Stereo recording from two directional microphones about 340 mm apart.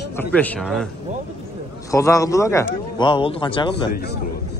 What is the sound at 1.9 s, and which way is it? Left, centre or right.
Speech, centre.